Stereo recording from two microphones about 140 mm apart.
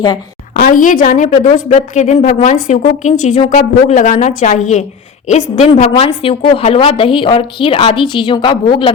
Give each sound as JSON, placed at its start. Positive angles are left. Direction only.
{"t": 0.6, "sound": "a woman's voice", "side_deg": 75}